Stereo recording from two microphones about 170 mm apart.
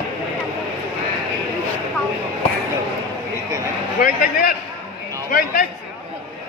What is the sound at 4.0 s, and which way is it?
Speech, 55° left (ahead or behind).